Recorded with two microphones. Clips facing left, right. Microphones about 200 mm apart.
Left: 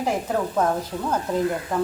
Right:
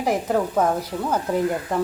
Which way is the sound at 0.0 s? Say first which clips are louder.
Right 2 dB; 10° right (ahead or behind).